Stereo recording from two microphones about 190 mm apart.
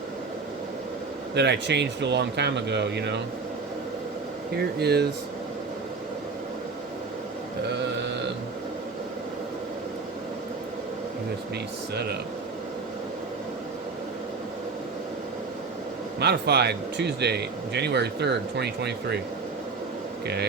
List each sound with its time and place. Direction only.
1.4 s speech: 65° right (ahead or behind)
4.5 s speech: 60° right (ahead or behind)
16.2 s speech: 60° right (ahead or behind)
20.2 s speech: 60° right (ahead or behind)